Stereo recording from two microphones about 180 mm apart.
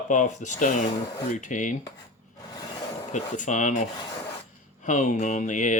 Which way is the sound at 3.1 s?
45° left (ahead or behind).